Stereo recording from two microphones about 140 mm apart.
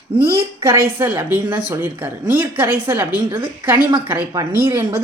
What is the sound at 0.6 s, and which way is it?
A woman's voice, 15° right (ahead or behind).